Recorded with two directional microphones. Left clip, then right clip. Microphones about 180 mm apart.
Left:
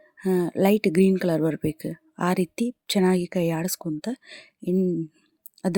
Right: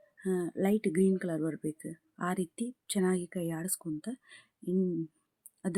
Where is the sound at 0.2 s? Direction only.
45° left (ahead or behind).